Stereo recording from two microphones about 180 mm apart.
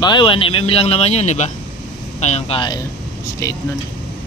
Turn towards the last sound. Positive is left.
turn(degrees=15)  # may be behind; listen again after turning